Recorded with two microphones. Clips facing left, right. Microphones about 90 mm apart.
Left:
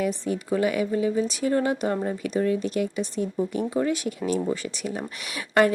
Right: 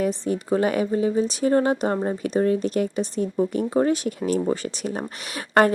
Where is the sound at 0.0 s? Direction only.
40° right (ahead or behind).